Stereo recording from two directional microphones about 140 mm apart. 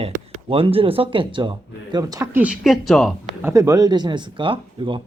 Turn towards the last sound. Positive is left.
turn(degrees=-35)  # may be behind; listen again after turning